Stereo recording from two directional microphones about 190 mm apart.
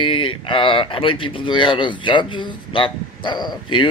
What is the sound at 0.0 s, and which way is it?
A man's voice, 25° left (ahead or behind).